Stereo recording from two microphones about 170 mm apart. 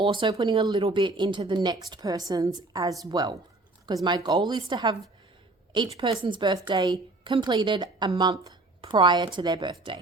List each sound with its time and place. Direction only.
0.0 s speech: 30° right (ahead or behind)